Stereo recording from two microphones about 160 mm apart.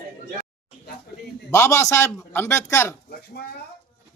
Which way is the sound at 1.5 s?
20° left (ahead or behind).